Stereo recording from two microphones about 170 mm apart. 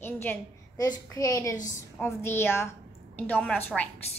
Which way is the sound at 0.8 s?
20° left (ahead or behind).